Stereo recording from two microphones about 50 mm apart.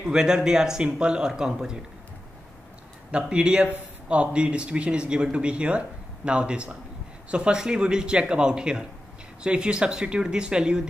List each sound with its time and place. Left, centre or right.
0.0 s speech: centre
3.1 s speech: right